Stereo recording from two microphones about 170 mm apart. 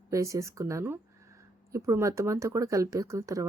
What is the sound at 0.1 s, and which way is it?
Speech, 20° right (ahead or behind).